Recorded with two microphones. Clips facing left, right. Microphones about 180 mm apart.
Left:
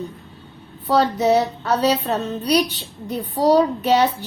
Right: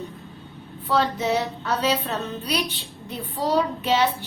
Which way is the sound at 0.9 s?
40° left (ahead or behind).